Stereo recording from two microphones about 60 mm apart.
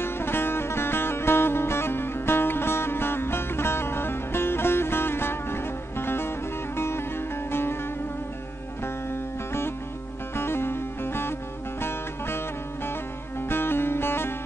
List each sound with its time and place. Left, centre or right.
0.0 s music: left
8.8 s music: left